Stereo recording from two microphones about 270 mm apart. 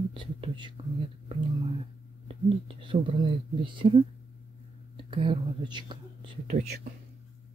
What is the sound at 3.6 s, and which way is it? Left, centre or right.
Speech, centre.